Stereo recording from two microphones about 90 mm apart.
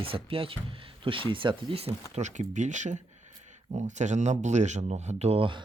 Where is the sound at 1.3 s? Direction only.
70° right (ahead or behind); by 1.9 s 90° right.